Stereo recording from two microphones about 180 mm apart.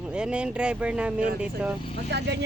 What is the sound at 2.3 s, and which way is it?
Speech, 70° right (ahead or behind).